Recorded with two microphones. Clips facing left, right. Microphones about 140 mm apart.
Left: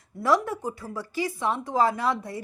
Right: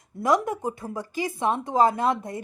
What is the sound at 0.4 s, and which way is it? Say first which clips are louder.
Speech: right 3 dB; 20° right (ahead or behind).